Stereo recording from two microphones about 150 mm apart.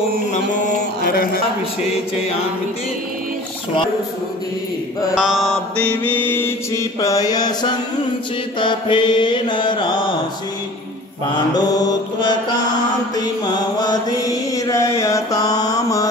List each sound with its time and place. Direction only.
1.0 s a man's voice: 70° left (ahead or behind)
5.1 s mantra: 5° right (ahead or behind); by 10.0 s 30° left (ahead or behind)
11.3 s mantra: 25° left (ahead or behind)